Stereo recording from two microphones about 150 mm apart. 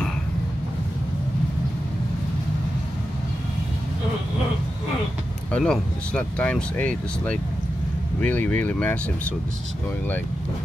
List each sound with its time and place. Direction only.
5.5 s speech: 5° left (ahead or behind)